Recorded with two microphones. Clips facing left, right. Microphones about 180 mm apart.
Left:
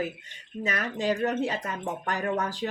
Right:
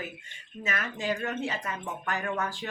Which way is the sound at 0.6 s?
35° left (ahead or behind).